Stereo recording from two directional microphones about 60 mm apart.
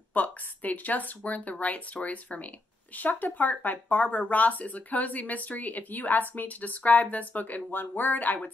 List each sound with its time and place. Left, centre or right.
0.1 s speech: left